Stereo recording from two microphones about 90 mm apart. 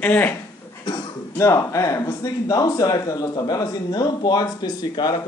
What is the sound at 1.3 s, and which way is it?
Speech, 35° left (ahead or behind).